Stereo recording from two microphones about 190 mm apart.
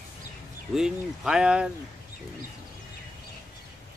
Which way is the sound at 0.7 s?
5° right (ahead or behind).